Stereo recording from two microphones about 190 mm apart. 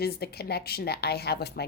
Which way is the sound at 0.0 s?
55° left (ahead or behind).